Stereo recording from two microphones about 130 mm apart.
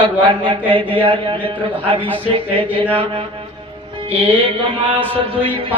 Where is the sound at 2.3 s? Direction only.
45° right (ahead or behind).